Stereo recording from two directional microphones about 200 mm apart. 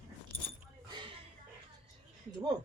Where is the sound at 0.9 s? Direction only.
25° right (ahead or behind).